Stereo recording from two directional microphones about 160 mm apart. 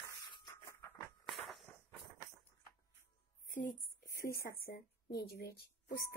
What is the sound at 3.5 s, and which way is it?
A woman's voice, 60° left (ahead or behind).